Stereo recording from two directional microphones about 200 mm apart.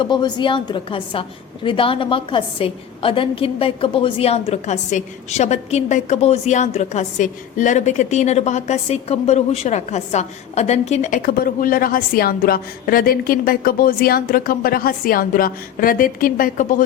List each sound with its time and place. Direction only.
0.0 s a woman's voice: 20° left (ahead or behind); by 16.8 s 40° left (ahead or behind)